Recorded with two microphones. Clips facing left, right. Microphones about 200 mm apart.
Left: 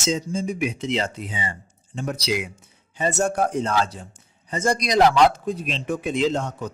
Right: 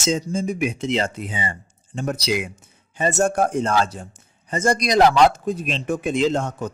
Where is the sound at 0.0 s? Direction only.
45° right (ahead or behind).